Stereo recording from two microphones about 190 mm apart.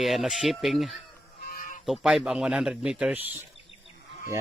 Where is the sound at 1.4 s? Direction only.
45° left (ahead or behind).